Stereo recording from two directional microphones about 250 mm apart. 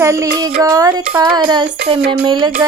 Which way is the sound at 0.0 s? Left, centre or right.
Centre.